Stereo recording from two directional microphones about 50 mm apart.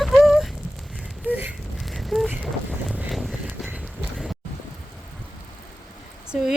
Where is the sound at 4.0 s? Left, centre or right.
Centre.